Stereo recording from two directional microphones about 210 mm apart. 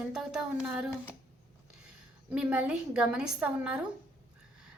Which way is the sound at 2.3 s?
5° right (ahead or behind).